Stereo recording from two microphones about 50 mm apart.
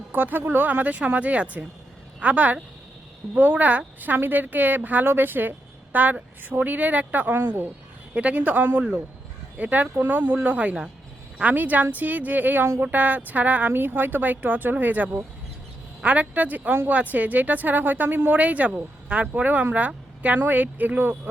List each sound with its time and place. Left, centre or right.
0.1 s speech: right
8.1 s speech: right